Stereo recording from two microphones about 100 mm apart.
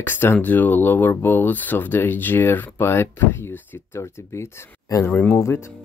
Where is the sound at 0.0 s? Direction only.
20° left (ahead or behind).